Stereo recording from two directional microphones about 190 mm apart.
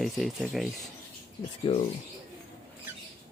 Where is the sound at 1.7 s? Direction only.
35° left (ahead or behind).